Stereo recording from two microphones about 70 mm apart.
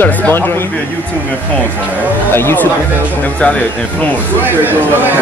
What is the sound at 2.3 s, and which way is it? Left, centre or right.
Speech, left.